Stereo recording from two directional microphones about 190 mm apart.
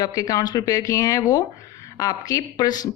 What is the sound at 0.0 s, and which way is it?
Speech, 20° left (ahead or behind).